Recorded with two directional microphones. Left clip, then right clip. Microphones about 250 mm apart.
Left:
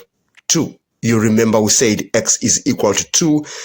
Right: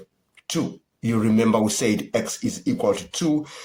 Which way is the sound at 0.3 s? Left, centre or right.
Left.